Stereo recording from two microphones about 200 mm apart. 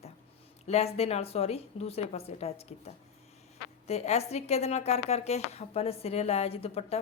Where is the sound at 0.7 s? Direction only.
30° left (ahead or behind).